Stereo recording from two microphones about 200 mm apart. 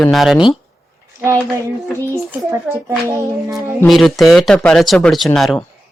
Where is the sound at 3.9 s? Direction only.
Centre (ahead or behind).